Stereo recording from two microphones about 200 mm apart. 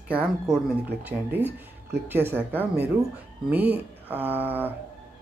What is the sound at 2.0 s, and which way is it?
Speech, 10° right (ahead or behind).